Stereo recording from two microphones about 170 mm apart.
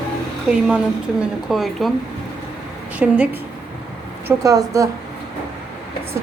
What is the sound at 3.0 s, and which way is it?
Speech, 10° right (ahead or behind).